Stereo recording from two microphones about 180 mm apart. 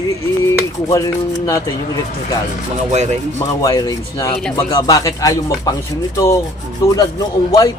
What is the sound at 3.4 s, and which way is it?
Speech, 20° left (ahead or behind).